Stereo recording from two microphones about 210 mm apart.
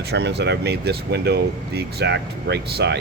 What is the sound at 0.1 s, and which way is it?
A man's voice, 55° right (ahead or behind).